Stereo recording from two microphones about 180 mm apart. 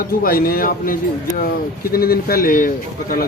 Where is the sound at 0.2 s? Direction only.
55° left (ahead or behind).